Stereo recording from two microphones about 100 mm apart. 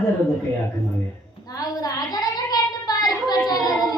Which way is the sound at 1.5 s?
40° left (ahead or behind).